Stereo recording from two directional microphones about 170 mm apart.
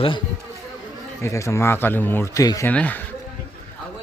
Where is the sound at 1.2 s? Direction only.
15° left (ahead or behind).